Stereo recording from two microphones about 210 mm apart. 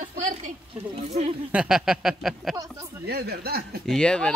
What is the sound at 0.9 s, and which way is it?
Speech, 30° right (ahead or behind).